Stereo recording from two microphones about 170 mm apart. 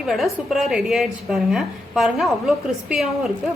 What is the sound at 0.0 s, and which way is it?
A woman's voice, centre (ahead or behind).